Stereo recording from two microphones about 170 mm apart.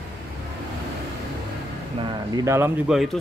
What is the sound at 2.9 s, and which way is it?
Speech, centre (ahead or behind).